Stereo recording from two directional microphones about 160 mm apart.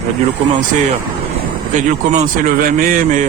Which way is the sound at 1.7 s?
50° right (ahead or behind).